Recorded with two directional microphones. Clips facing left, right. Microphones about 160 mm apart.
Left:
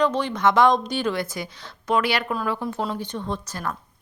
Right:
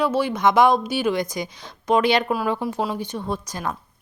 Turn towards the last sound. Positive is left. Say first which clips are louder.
# right 2 dB
turn(degrees=-15)  # may be behind; listen again after turning